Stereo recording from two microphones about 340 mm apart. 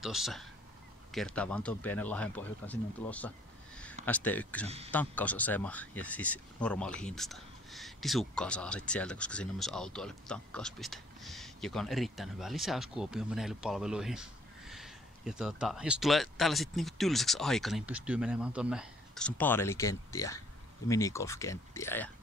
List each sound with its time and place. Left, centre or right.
0.0 s speech: centre
4.6 s speech: centre
4.9 s speech: centre